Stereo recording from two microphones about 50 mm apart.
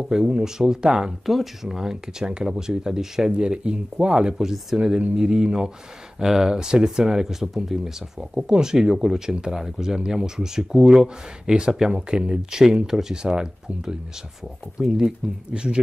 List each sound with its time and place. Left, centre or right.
0.1 s speech: centre
1.2 s speech: centre